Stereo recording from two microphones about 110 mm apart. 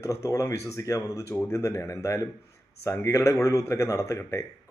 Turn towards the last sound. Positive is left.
turn(degrees=25)  # may be behind; listen again after turning